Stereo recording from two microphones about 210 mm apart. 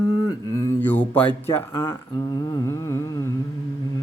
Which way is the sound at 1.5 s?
15° left (ahead or behind).